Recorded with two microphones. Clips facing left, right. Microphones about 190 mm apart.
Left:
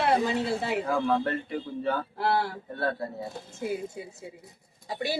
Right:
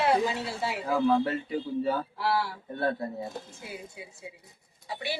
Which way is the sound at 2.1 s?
55° left (ahead or behind).